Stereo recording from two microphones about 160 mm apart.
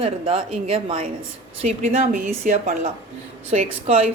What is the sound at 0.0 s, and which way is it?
A woman's voice, 35° right (ahead or behind).